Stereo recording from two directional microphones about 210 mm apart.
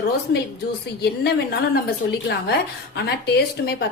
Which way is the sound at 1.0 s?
50° left (ahead or behind).